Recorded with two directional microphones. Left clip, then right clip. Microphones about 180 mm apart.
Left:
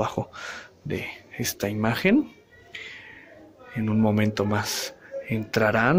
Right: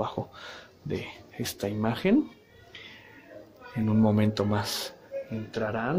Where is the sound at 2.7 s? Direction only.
Centre (ahead or behind).